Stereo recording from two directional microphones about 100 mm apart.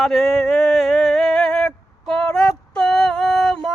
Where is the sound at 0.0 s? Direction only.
Centre (ahead or behind).